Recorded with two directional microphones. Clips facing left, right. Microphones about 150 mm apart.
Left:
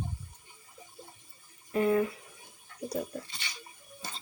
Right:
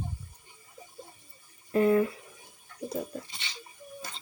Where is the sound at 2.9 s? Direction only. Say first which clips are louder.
Even; 25° right (ahead or behind).